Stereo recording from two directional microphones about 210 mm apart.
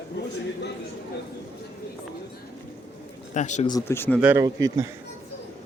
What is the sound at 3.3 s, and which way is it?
Speech, 35° left (ahead or behind).